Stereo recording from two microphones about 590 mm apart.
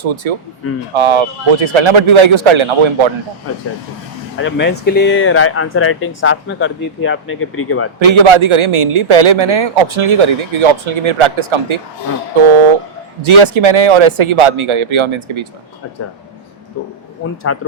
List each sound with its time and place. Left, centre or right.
0.0 s a man's voice: right
4.4 s speech: centre
7.9 s a man's voice: right
13.2 s a man's voice: right
17.5 s speech: left